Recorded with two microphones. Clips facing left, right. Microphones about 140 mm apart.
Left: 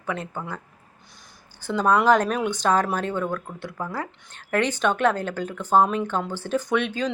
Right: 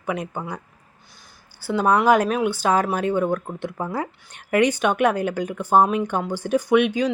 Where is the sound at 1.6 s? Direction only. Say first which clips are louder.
Right 2 dB; 10° right (ahead or behind).